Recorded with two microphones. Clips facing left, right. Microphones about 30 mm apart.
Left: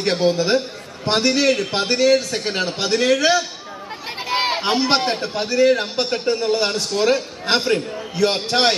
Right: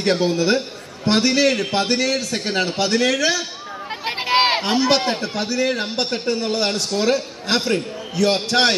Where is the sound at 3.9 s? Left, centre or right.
Right.